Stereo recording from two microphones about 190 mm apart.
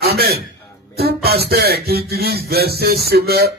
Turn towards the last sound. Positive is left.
turn(degrees=-55)  # may be behind; listen again after turning